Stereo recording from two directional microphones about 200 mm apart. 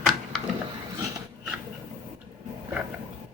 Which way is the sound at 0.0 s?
Centre (ahead or behind).